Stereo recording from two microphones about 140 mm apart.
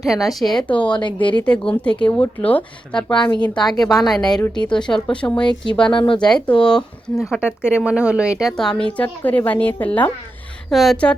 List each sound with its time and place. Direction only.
0.0 s speech: centre (ahead or behind)
0.9 s speech: 35° left (ahead or behind)
1.5 s speech: 5° left (ahead or behind)
4.3 s speech: 25° left (ahead or behind)
4.7 s speech: 5° left (ahead or behind)
5.9 s speech: 35° left (ahead or behind)
6.1 s speech: 5° left (ahead or behind)
10.7 s speech: centre (ahead or behind)